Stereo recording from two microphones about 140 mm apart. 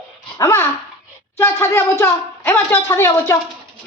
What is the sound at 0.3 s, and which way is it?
Dog, 20° left (ahead or behind).